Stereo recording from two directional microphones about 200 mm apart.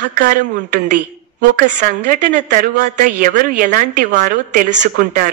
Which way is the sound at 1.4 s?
40° right (ahead or behind).